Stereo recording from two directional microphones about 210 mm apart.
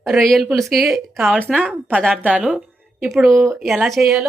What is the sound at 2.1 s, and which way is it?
A woman's voice, 5° right (ahead or behind).